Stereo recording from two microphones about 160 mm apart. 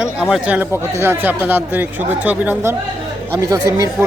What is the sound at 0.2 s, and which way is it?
Speech, 5° right (ahead or behind).